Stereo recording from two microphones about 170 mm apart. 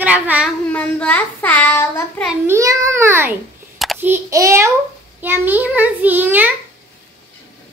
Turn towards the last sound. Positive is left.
turn(degrees=-10)  # may be behind; listen again after turning